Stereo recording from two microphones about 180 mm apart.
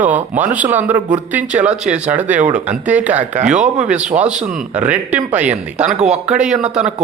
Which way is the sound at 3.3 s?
40° right (ahead or behind).